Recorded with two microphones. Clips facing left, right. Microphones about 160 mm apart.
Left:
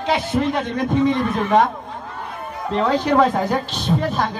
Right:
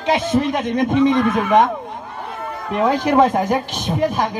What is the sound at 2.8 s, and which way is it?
A man's voice, 15° right (ahead or behind).